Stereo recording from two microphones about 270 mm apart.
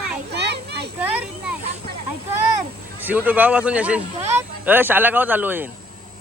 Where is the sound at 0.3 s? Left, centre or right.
Right.